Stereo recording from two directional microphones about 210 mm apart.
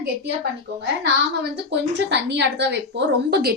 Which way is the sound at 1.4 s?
55° right (ahead or behind).